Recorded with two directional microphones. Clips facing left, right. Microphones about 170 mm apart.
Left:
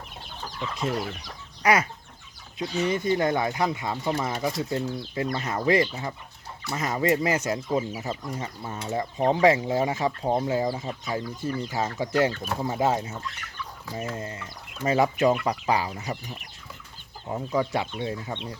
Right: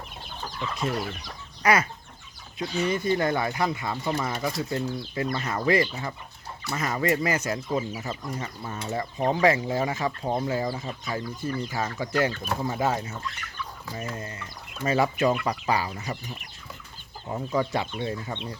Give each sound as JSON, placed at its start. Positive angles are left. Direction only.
{"t": 0.8, "sound": "speech", "side_deg": 25}
{"t": 1.6, "sound": "chicken", "side_deg": 15}
{"t": 2.6, "sound": "speech", "side_deg": 20}
{"t": 17.2, "sound": "speech", "side_deg": 10}